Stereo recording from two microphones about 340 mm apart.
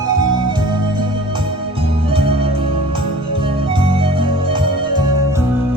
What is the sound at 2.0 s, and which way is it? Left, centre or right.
Music, centre.